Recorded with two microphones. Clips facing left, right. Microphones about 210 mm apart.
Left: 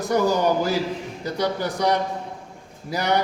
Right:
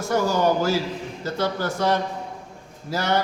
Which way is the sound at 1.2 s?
15° left (ahead or behind).